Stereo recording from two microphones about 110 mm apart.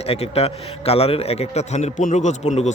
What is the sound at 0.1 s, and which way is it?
A man's voice, 65° left (ahead or behind).